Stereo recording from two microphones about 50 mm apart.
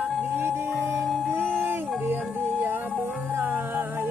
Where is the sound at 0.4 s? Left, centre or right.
Right.